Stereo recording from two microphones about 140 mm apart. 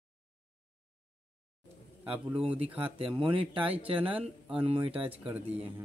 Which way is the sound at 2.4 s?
45° right (ahead or behind).